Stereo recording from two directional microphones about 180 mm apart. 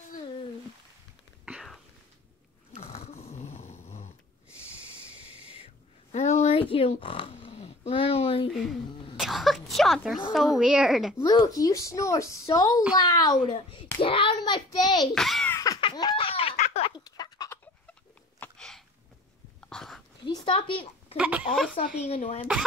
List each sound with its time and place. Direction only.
1.4 s whispering: 5° right (ahead or behind)
2.8 s dog: 35° left (ahead or behind)
6.1 s a sound: 40° left (ahead or behind)
8.6 s a woman's voice: centre (ahead or behind)
11.2 s a child's voice: 20° left (ahead or behind)
15.1 s a child's voice: centre (ahead or behind)
15.5 s a sound: 20° left (ahead or behind); by 16.9 s 40° left (ahead or behind)
16.9 s fowl: 20° left (ahead or behind)
18.4 s a sound: 5° left (ahead or behind)
20.2 s a sound: 25° left (ahead or behind)
21.2 s speech: 5° right (ahead or behind)
21.7 s speech: 40° left (ahead or behind)